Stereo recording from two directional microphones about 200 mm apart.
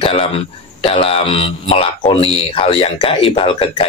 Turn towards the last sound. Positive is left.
turn(degrees=25)  # may be behind; listen again after turning